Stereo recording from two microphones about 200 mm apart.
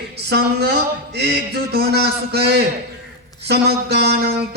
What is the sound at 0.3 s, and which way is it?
A man's voice, 55° right (ahead or behind).